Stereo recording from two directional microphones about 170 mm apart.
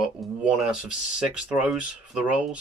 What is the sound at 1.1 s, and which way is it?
Speech, 5° right (ahead or behind).